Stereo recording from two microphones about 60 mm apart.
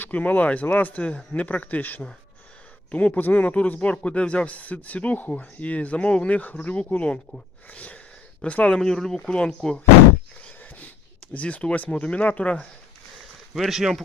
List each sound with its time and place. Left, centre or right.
0.0 s speech: left
8.7 s speech: centre
10.6 s a sound: left
11.3 s speech: left
13.5 s speech: centre